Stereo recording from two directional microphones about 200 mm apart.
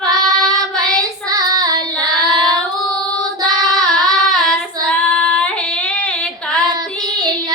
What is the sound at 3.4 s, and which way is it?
Child singing, 20° right (ahead or behind).